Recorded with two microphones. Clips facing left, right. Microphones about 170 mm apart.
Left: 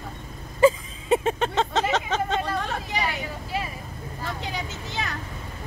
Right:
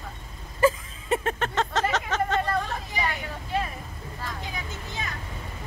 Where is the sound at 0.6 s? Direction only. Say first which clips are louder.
Left 4 dB; 20° left (ahead or behind).